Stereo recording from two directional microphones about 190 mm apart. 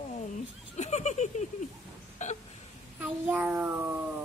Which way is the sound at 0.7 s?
35° left (ahead or behind).